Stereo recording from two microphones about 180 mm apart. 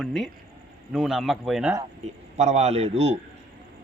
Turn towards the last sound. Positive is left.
turn(degrees=-35)  # may be behind; listen again after turning